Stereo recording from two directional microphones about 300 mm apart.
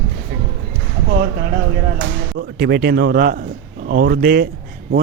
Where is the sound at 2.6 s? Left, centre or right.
Right.